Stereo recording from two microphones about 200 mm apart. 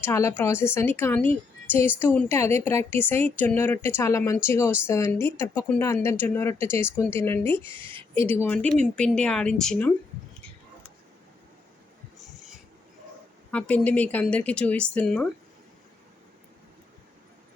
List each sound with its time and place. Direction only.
0.0 s speech: 15° left (ahead or behind)
7.8 s a woman's voice: 25° right (ahead or behind)
8.1 s speech: 10° left (ahead or behind)
13.5 s speech: 5° left (ahead or behind)